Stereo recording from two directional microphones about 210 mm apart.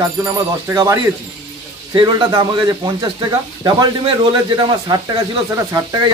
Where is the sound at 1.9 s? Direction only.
20° right (ahead or behind).